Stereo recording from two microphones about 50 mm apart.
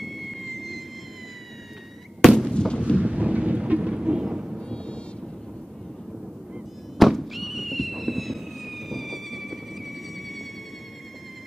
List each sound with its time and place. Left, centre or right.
0.0 s train: centre
2.2 s fireworks: centre
2.5 s artillery fire: centre
3.0 s thunder: right
4.6 s thunder: centre
7.0 s fireworks: centre